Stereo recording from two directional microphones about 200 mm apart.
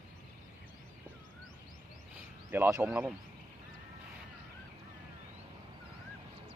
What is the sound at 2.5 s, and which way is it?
Speech, 15° right (ahead or behind).